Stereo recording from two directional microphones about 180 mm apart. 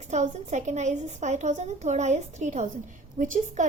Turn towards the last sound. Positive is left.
turn(degrees=-45)  # may be behind; listen again after turning